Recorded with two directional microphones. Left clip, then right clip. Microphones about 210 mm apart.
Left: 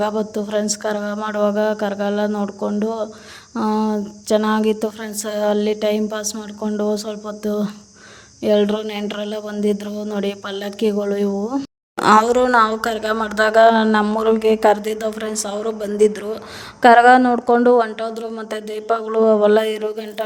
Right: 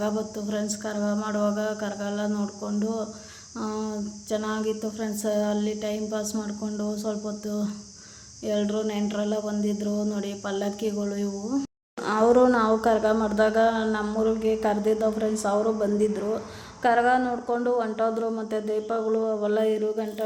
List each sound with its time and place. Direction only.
0.0 s speech: 40° left (ahead or behind)